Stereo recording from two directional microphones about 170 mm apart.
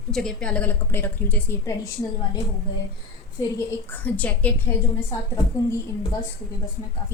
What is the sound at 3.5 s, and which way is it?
A woman's voice, 10° left (ahead or behind).